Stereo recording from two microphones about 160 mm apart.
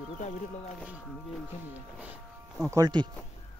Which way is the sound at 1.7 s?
10° right (ahead or behind).